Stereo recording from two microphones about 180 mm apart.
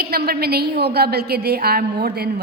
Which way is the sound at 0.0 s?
60° right (ahead or behind).